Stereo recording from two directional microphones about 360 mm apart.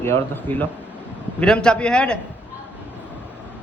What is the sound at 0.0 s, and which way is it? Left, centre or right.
A man's voice, centre.